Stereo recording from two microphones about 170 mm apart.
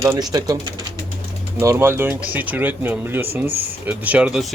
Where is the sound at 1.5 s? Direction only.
15° right (ahead or behind).